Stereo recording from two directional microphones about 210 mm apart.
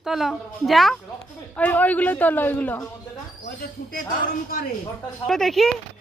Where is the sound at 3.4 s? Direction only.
40° left (ahead or behind).